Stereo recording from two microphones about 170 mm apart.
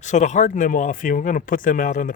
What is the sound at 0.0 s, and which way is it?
Speech, 45° left (ahead or behind).